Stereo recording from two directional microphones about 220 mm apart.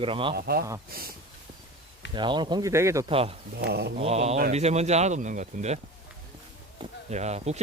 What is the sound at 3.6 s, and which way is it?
Mantra, 50° right (ahead or behind).